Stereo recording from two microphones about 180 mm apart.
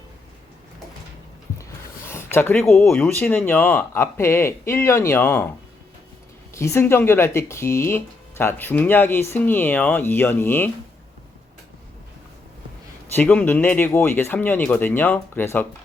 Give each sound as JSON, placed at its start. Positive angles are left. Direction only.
{"t": 2.0, "sound": "speech", "side_deg": 15}
{"t": 6.5, "sound": "speech", "side_deg": 15}
{"t": 13.1, "sound": "speech", "side_deg": 10}